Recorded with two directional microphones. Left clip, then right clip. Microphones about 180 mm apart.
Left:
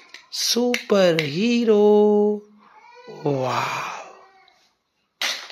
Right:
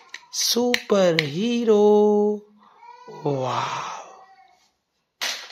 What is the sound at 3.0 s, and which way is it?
Speech, centre (ahead or behind).